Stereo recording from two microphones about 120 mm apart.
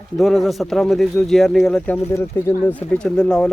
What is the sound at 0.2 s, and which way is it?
A man's voice, centre (ahead or behind).